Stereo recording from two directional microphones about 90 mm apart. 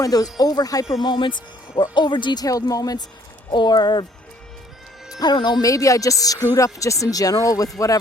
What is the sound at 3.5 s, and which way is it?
Speech, 55° left (ahead or behind).